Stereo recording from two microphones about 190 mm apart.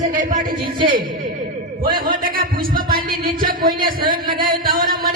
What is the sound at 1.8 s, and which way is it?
A man's voice, 50° right (ahead or behind).